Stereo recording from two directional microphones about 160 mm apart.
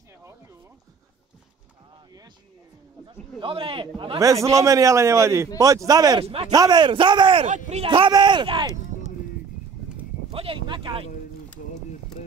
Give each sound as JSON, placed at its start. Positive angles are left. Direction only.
{"t": 3.1, "sound": "a man's voice", "side_deg": -30}
{"t": 4.2, "sound": "a man's voice", "side_deg": -20}
{"t": 6.2, "sound": "speech", "side_deg": -40}
{"t": 6.5, "sound": "a man's voice", "side_deg": -25}
{"t": 7.4, "sound": "speech", "side_deg": -50}
{"t": 7.8, "sound": "a man's voice", "side_deg": -35}
{"t": 10.3, "sound": "a sound", "side_deg": -35}